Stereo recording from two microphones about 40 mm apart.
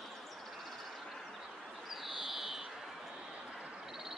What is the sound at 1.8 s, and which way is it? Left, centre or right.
Bird, centre.